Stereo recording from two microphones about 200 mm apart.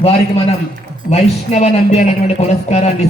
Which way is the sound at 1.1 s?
35° left (ahead or behind).